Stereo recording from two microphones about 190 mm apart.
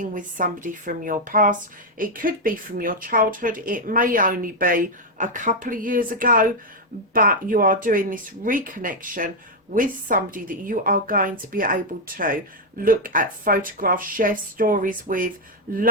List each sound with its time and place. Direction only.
0.0 s speech: 45° right (ahead or behind)